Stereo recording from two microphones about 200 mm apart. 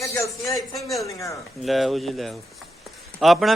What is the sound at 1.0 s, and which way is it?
Speech, 15° left (ahead or behind).